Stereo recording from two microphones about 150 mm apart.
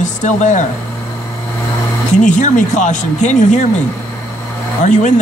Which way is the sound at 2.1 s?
55° left (ahead or behind).